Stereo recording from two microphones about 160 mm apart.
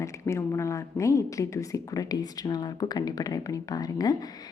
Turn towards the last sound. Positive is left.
turn(degrees=25)  # may be behind; listen again after turning